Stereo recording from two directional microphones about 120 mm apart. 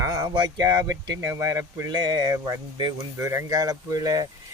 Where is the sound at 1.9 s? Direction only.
35° right (ahead or behind).